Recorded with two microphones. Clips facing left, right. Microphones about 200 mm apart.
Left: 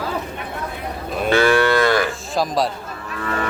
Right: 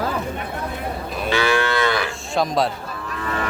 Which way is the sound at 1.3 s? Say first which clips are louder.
Left 5 dB; 50° left (ahead or behind).